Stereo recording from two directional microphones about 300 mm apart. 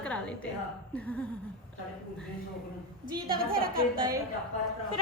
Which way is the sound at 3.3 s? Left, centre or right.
Right.